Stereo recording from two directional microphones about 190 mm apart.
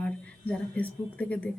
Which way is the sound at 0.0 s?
5° left (ahead or behind).